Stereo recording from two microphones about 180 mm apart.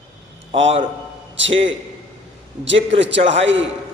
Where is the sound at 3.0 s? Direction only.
85° right.